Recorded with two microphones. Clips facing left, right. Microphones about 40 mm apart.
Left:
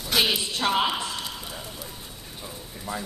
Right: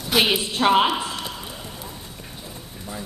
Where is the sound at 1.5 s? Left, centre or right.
Centre.